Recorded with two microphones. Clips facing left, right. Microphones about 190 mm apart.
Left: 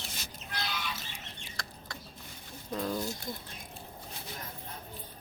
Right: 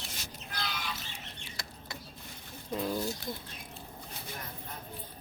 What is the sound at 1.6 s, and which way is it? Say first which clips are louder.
Chicken: left 2 dB; 5° right (ahead or behind).